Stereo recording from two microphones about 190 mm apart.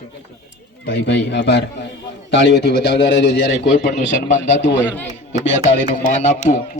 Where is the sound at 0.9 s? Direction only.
65° left (ahead or behind).